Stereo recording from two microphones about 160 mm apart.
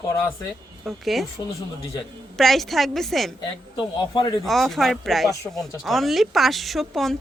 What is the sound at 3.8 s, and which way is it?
Speech, 30° left (ahead or behind).